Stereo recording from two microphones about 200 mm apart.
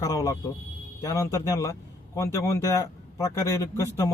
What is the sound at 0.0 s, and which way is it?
Speech, 15° left (ahead or behind).